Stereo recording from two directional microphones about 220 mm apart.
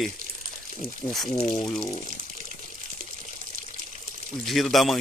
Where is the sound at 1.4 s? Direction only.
30° left (ahead or behind).